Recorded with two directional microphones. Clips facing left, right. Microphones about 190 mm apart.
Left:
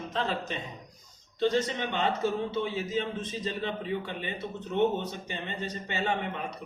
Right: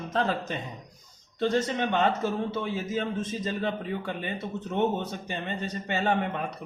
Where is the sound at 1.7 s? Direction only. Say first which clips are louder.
Right 4 dB; 50° right (ahead or behind).